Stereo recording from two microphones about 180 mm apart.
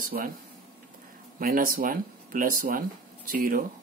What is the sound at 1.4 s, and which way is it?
Speech, 55° right (ahead or behind).